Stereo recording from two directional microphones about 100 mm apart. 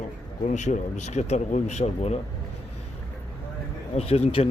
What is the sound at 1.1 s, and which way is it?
Speech, 90° left.